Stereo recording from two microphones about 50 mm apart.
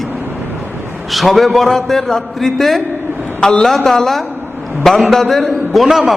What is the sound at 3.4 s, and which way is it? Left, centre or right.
Speech, centre.